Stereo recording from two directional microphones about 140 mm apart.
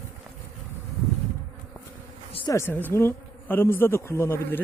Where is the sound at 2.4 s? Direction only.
20° left (ahead or behind).